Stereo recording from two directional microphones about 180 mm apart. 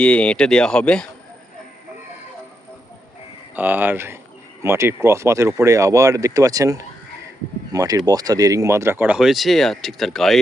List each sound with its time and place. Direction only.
0.0 s speech: 5° left (ahead or behind)
3.5 s speech: 10° right (ahead or behind)